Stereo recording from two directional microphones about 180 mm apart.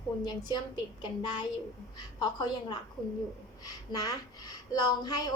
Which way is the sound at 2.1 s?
20° left (ahead or behind).